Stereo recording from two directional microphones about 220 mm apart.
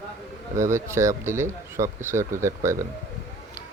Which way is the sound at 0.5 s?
15° right (ahead or behind).